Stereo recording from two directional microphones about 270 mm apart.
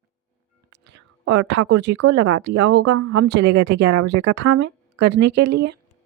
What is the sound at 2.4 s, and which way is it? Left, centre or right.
Speech, right.